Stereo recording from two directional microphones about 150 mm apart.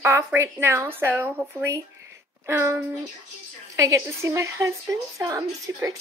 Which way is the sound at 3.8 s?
20° right (ahead or behind).